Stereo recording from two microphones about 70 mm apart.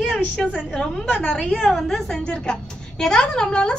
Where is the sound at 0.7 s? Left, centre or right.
Centre.